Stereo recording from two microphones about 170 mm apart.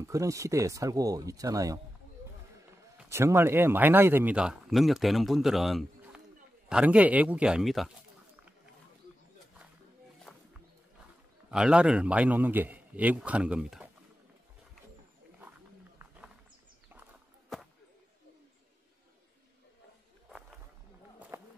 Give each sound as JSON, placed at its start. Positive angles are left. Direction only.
{"t": 0.0, "sound": "speech", "side_deg": -20}
{"t": 3.1, "sound": "a man's voice", "side_deg": -15}
{"t": 10.3, "sound": "music", "side_deg": 0}
{"t": 11.5, "sound": "a man's voice", "side_deg": -5}
{"t": 20.2, "sound": "a sound", "side_deg": -5}
{"t": 21.3, "sound": "run", "side_deg": -15}